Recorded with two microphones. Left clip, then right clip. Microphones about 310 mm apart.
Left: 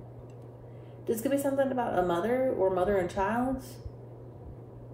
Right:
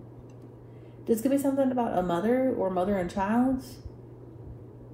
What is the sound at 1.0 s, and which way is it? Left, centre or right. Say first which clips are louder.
Speech: right 3 dB; right.